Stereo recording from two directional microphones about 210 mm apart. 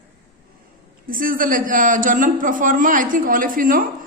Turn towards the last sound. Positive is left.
turn(degrees=-40)  # may be behind; listen again after turning